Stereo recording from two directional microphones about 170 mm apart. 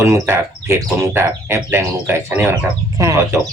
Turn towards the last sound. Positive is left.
turn(degrees=-15)  # may be behind; listen again after turning